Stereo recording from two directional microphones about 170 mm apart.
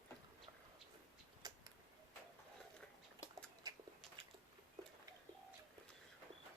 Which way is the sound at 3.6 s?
20° right (ahead or behind).